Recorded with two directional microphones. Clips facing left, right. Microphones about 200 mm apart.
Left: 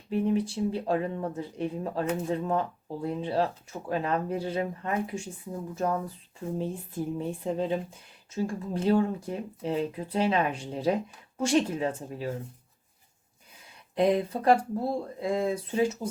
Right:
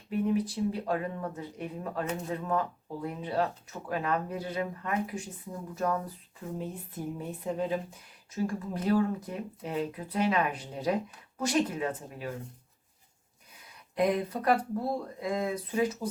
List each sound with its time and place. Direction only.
0.1 s speech: 30° left (ahead or behind)
13.9 s speech: 25° left (ahead or behind)